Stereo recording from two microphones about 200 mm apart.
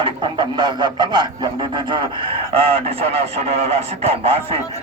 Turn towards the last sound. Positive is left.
turn(degrees=-30)  # may be behind; listen again after turning